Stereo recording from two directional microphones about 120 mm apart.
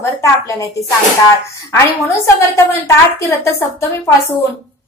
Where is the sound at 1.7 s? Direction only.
25° left (ahead or behind).